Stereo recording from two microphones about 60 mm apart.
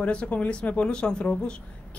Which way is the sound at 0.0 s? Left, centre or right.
Centre.